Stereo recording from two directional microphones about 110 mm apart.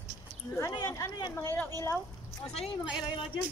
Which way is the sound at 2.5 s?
70° left (ahead or behind).